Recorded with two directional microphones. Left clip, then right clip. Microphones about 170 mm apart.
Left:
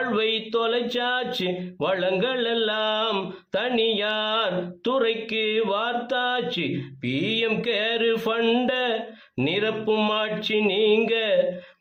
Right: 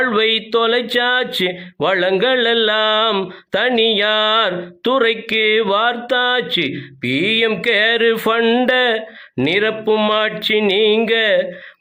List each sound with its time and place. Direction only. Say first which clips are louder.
0.0 s speech: right 9 dB; 30° right (ahead or behind)